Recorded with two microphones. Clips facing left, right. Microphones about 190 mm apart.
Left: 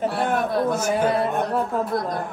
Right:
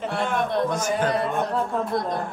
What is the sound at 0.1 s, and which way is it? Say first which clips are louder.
A man's voice: left 2 dB; centre (ahead or behind).